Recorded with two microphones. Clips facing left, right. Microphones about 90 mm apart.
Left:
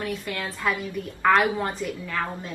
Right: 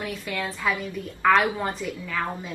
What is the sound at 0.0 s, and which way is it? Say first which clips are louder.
Speech: even; centre (ahead or behind).